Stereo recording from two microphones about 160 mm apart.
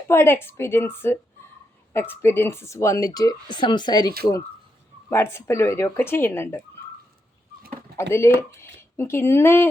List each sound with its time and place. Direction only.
0.1 s speech: 15° left (ahead or behind)
5.0 s speech: 15° left (ahead or behind)
8.1 s speech: 15° left (ahead or behind)